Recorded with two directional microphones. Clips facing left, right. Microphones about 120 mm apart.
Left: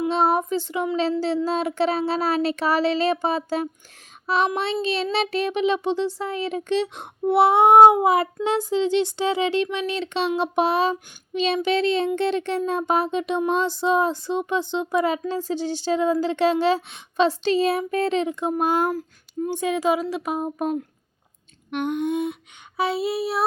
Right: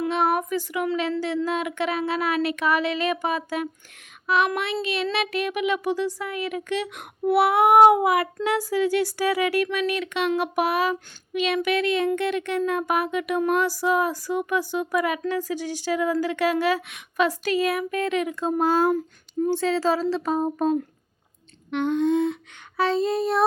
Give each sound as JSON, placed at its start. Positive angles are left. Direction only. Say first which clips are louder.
{"t": 0.1, "sound": "a sound", "louder": "left 3 dB", "side_deg": 30}
{"t": 1.5, "sound": "speech", "louder": "left 3 dB", "side_deg": 30}
{"t": 18.5, "sound": "speech", "louder": "right 2 dB", "side_deg": 15}
{"t": 18.9, "sound": "child singing", "louder": "right 4 dB", "side_deg": 5}
{"t": 19.5, "sound": "speech", "louder": "even", "side_deg": 15}